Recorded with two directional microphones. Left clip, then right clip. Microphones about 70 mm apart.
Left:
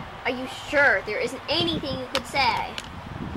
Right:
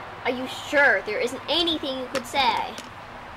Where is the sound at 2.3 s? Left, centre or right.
Right.